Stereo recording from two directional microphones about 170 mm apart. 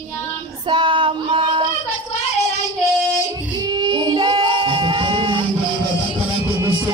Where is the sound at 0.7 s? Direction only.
30° right (ahead or behind).